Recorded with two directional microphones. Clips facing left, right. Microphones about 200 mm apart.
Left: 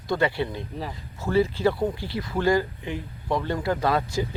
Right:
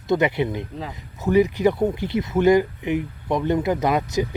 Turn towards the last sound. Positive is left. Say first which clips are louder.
# right 3 dB
turn(degrees=-20)  # may be behind; listen again after turning